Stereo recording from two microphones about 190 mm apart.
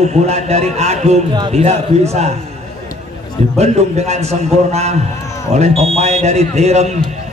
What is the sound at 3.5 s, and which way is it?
A man's voice, 35° right (ahead or behind).